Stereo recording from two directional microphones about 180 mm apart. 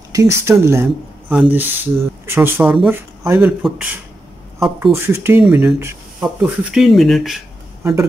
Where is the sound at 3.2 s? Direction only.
15° right (ahead or behind).